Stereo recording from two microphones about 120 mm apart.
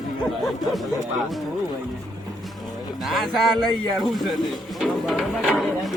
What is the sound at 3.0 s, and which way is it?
Speech, centre (ahead or behind).